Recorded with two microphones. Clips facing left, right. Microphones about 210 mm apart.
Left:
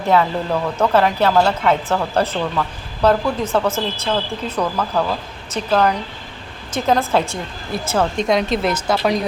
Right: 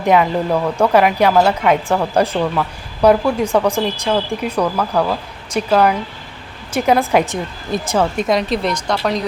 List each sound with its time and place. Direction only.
0.0 s speech: 15° right (ahead or behind); by 9.1 s 5° left (ahead or behind)